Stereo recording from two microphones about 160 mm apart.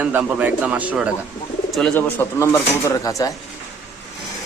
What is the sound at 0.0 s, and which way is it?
Speech, 10° right (ahead or behind).